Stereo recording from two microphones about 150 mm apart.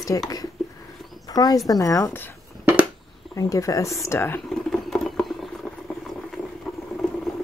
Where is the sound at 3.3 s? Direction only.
20° left (ahead or behind).